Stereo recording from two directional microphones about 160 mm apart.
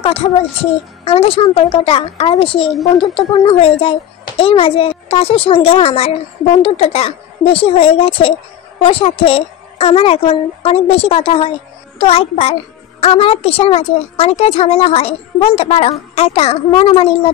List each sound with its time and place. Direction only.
0.0 s speech: 35° left (ahead or behind)